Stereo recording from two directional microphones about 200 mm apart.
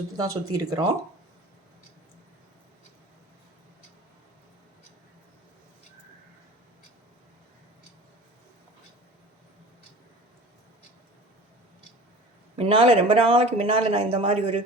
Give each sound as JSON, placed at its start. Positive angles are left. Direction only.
{"t": 0.2, "sound": "speech", "side_deg": -20}
{"t": 12.5, "sound": "speech", "side_deg": -30}